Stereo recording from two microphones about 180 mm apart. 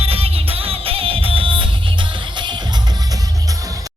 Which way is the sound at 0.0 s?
35° right (ahead or behind).